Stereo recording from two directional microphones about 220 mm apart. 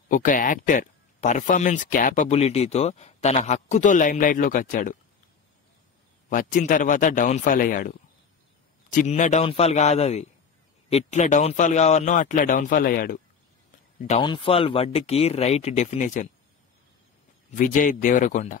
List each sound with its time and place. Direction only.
0.1 s speech: 40° left (ahead or behind)
6.2 s speech: 35° left (ahead or behind)
14.2 s speech: 20° left (ahead or behind)
17.6 s speech: 35° left (ahead or behind)